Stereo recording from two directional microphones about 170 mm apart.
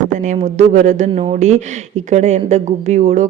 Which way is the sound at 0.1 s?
45° right (ahead or behind).